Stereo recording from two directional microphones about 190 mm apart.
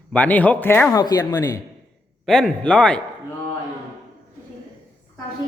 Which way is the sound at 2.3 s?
5° left (ahead or behind).